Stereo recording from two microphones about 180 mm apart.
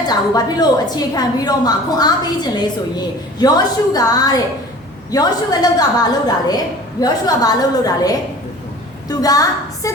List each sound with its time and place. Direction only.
0.1 s a woman's voice: 20° left (ahead or behind)